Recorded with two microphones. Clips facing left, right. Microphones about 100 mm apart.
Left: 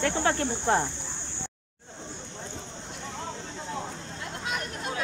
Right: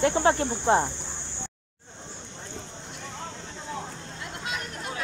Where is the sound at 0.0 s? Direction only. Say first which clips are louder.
Right 4 dB; 25° right (ahead or behind).